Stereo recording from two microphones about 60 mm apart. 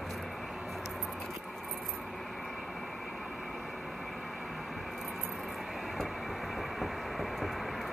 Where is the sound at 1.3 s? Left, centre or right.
Centre.